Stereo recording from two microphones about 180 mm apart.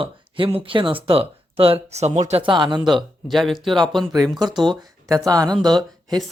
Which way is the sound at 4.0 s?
20° right (ahead or behind).